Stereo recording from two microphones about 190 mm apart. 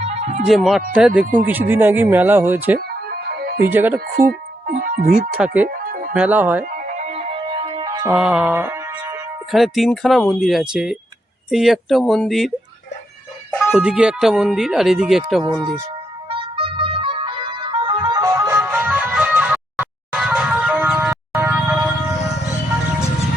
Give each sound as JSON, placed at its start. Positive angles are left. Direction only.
{"t": 0.0, "sound": "music", "side_deg": -35}
{"t": 0.4, "sound": "speech", "side_deg": 0}
{"t": 2.7, "sound": "music", "side_deg": -55}
{"t": 3.6, "sound": "speech", "side_deg": -10}
{"t": 4.1, "sound": "speech", "side_deg": -50}
{"t": 5.6, "sound": "music", "side_deg": -50}
{"t": 6.1, "sound": "speech", "side_deg": -10}
{"t": 6.8, "sound": "music", "side_deg": -40}
{"t": 8.1, "sound": "music", "side_deg": -5}
{"t": 9.5, "sound": "speech", "side_deg": 0}
{"t": 13.7, "sound": "speech", "side_deg": -5}
{"t": 16.3, "sound": "music", "side_deg": -30}